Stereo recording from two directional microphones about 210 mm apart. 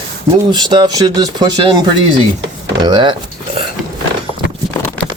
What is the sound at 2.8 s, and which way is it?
Dishes, 20° right (ahead or behind).